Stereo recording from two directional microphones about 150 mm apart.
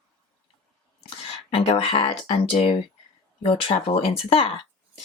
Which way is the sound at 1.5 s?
40° left (ahead or behind).